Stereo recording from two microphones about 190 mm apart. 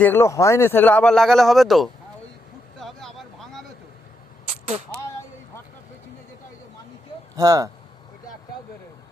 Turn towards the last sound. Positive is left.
turn(degrees=-20)  # may be behind; listen again after turning